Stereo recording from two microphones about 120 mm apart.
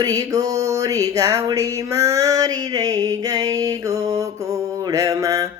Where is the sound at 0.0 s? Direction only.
30° right (ahead or behind).